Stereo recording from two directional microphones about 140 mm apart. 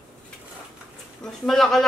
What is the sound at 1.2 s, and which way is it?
Speech, centre (ahead or behind).